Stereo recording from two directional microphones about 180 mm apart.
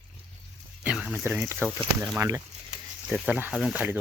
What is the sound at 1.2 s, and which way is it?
Speech, 10° right (ahead or behind).